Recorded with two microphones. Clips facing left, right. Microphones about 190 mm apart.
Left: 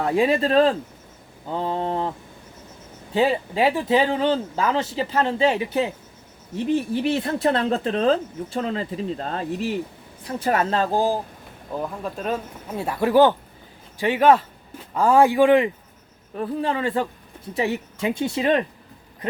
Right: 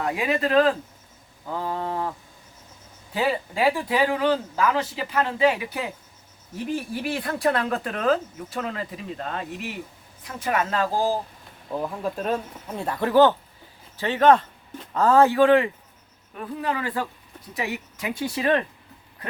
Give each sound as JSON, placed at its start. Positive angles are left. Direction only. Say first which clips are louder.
{"t": 0.0, "sound": "speech", "louder": "left 5 dB", "side_deg": 30}
{"t": 3.2, "sound": "speech", "louder": "left 4 dB", "side_deg": 25}
{"t": 11.7, "sound": "speech", "louder": "right 1 dB", "side_deg": 0}
{"t": 16.3, "sound": "speech", "louder": "left 4 dB", "side_deg": 30}